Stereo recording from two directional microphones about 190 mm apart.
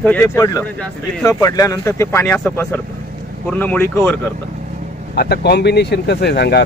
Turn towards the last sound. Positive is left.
turn(degrees=60)  # may be behind; listen again after turning